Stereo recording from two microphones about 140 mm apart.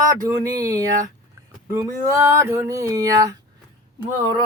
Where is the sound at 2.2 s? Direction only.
20° right (ahead or behind).